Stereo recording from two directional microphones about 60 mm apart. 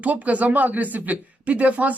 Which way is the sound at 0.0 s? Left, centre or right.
Right.